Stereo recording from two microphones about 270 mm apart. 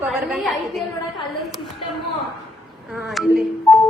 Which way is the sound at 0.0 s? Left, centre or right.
Centre.